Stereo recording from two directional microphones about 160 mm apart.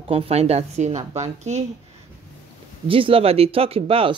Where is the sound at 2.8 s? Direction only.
35° right (ahead or behind).